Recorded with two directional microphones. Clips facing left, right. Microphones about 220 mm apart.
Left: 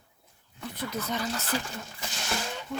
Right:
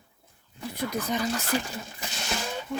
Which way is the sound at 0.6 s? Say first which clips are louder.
Right 3 dB; 10° right (ahead or behind).